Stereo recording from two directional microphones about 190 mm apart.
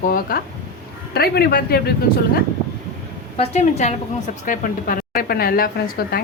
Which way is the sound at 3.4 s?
35° left (ahead or behind).